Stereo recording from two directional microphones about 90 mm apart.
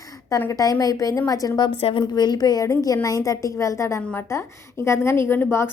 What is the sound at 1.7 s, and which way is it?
A woman's voice, 80° left.